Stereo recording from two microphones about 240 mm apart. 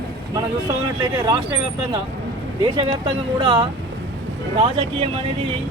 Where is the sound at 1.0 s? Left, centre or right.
Right.